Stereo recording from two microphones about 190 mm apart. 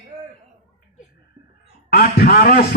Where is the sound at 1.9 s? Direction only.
55° left (ahead or behind).